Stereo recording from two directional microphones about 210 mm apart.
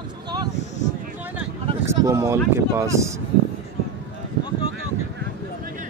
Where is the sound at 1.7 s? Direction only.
15° right (ahead or behind).